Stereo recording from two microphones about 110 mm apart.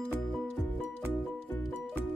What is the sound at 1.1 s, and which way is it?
Music, 15° left (ahead or behind).